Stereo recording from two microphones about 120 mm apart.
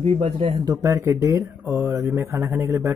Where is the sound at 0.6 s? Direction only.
25° right (ahead or behind).